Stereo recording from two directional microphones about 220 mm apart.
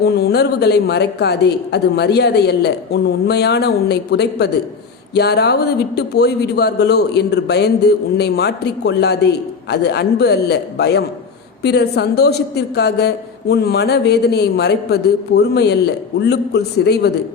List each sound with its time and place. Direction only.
0.0 s a man's voice: 45° left (ahead or behind)